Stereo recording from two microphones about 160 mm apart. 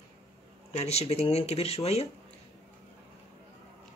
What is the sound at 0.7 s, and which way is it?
Speech, 40° left (ahead or behind).